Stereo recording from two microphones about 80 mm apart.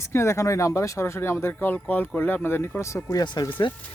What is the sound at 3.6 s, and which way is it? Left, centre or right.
Speech, left.